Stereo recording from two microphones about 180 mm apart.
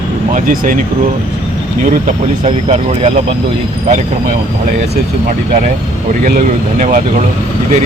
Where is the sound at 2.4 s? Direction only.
35° right (ahead or behind).